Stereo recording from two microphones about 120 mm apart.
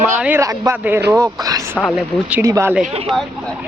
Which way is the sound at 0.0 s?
15° right (ahead or behind).